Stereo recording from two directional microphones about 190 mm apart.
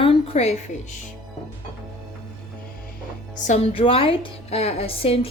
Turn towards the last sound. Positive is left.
turn(degrees=30)  # may be behind; listen again after turning